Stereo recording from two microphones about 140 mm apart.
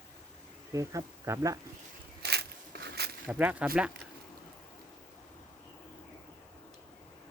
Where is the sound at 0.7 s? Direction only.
25° right (ahead or behind).